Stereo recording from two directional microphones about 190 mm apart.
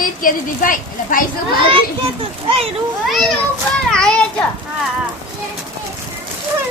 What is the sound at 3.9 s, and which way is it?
Children playing, 5° left (ahead or behind).